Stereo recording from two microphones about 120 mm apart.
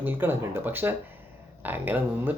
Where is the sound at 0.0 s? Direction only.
15° right (ahead or behind).